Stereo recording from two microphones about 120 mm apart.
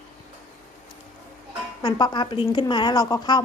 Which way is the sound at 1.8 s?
40° left (ahead or behind).